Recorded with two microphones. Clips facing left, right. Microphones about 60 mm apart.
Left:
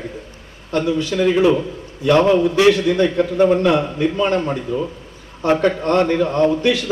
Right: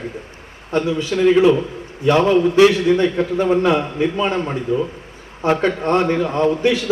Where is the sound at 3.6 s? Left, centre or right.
Right.